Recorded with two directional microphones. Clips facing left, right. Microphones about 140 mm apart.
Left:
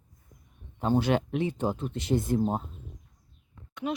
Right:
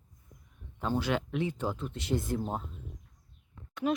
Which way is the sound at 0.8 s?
25° left (ahead or behind).